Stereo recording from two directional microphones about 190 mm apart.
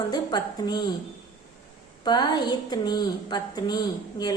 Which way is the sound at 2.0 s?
20° left (ahead or behind).